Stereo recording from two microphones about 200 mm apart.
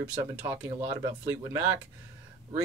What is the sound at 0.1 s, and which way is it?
Speech, 10° right (ahead or behind).